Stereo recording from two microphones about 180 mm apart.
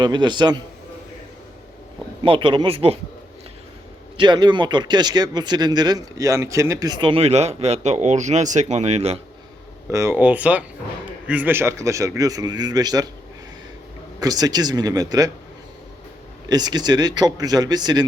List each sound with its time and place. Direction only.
0.0 s speech: 25° right (ahead or behind)
2.2 s speech: 30° right (ahead or behind)
4.2 s speech: 25° right (ahead or behind)
9.9 s speech: 15° right (ahead or behind)
14.2 s speech: 20° right (ahead or behind)
16.5 s speech: 25° right (ahead or behind)